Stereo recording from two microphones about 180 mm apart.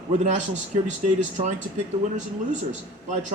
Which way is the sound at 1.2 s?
40° right (ahead or behind).